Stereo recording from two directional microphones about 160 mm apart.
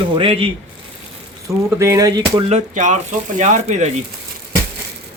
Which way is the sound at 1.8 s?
20° right (ahead or behind).